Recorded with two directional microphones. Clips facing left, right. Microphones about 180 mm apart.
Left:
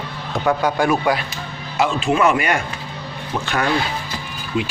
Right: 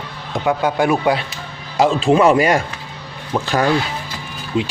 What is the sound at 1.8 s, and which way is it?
Speech, 35° right (ahead or behind).